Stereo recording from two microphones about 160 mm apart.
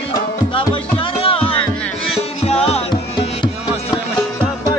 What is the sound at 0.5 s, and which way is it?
Music, 35° left (ahead or behind).